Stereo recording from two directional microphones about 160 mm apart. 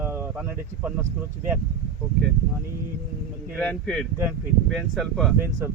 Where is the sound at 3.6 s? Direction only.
5° left (ahead or behind).